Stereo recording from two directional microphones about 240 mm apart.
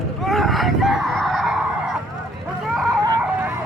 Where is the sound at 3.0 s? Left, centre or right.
Centre.